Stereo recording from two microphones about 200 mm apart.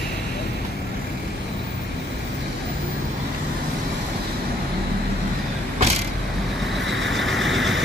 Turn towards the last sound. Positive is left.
turn(degrees=0)  # may be behind; listen again after turning